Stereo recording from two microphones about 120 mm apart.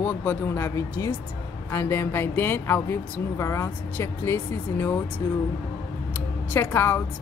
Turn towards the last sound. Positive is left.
turn(degrees=20)  # may be behind; listen again after turning